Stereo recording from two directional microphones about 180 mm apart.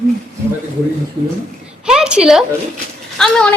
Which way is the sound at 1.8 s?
5° right (ahead or behind).